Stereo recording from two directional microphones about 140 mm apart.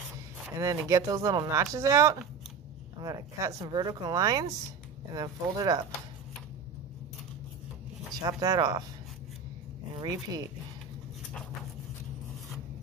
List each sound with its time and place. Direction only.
0.6 s speech: 20° right (ahead or behind)
8.1 s speech: 25° right (ahead or behind)
10.0 s speech: 25° right (ahead or behind)